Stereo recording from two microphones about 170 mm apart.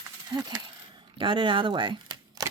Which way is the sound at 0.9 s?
30° right (ahead or behind).